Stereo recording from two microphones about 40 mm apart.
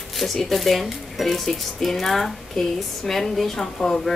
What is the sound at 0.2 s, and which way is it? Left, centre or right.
Speech, centre.